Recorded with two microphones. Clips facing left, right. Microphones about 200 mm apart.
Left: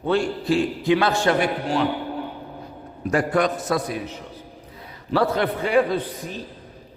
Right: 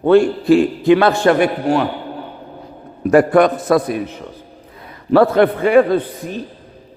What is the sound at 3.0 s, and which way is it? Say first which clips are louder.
A man's voice: right 9 dB; 60° right (ahead or behind).